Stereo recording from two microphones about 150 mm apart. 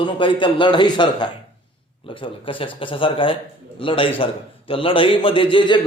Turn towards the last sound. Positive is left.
turn(degrees=35)  # may be behind; listen again after turning